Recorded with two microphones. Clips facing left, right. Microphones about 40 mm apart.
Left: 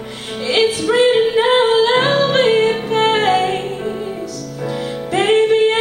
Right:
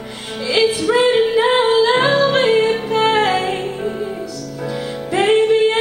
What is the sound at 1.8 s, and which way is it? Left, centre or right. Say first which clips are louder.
Music: even; left.